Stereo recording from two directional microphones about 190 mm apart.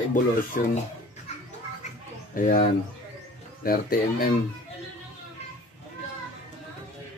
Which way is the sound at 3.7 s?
50° left (ahead or behind).